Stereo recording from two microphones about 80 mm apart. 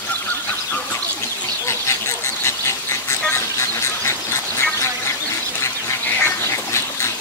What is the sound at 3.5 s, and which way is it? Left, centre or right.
Duck, left.